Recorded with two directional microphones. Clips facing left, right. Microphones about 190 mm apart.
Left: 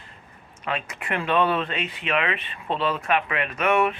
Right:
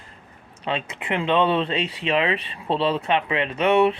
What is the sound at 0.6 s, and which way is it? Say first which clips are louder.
Speech: right 2 dB; 25° right (ahead or behind).